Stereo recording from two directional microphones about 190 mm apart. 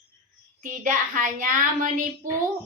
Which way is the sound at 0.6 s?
45° right (ahead or behind).